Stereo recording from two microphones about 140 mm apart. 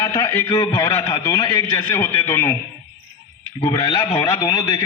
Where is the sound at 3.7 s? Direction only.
35° left (ahead or behind).